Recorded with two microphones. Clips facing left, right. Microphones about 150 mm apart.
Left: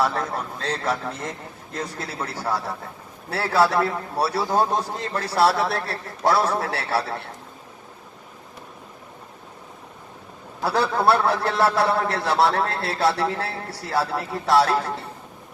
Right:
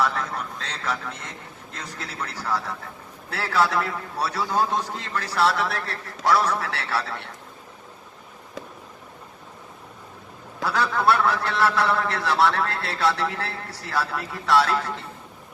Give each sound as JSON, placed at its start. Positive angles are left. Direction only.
{"t": 0.0, "sound": "a man's voice", "side_deg": 30}
{"t": 10.6, "sound": "a man's voice", "side_deg": 30}